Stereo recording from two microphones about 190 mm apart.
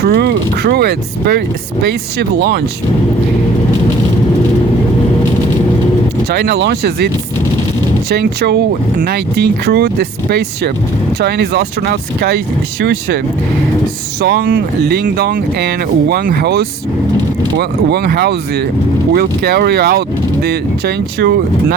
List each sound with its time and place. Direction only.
0.0 s speech: 55° right (ahead or behind)
6.3 s speech: 60° right (ahead or behind)
8.1 s speech: 60° right (ahead or behind)
14.2 s speech: 55° right (ahead or behind)